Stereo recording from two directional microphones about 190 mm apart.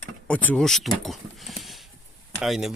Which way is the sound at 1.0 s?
Centre (ahead or behind).